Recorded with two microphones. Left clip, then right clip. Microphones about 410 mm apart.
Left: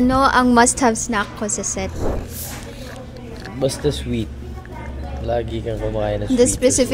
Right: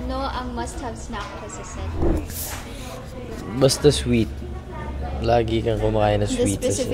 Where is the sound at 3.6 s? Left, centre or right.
Centre.